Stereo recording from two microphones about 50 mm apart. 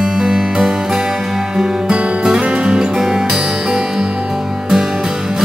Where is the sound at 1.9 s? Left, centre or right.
Right.